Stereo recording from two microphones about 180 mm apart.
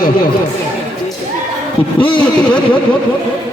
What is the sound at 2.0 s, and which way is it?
Speech, 25° left (ahead or behind).